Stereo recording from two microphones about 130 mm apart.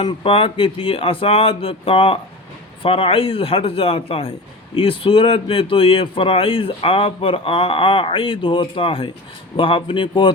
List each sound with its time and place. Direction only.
0.0 s a man's voice: 45° left (ahead or behind)